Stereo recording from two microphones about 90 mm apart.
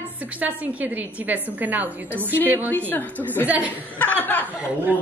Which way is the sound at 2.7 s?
20° left (ahead or behind).